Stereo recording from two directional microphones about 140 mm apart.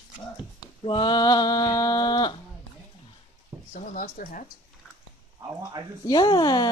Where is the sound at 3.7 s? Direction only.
75° left (ahead or behind).